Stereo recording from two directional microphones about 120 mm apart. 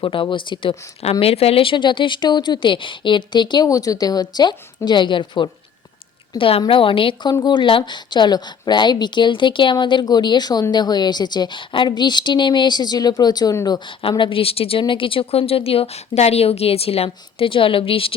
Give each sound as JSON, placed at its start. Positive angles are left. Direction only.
{"t": 0.0, "sound": "a woman's voice", "side_deg": 45}
{"t": 1.2, "sound": "a woman's voice", "side_deg": 55}
{"t": 14.0, "sound": "a woman's voice", "side_deg": 45}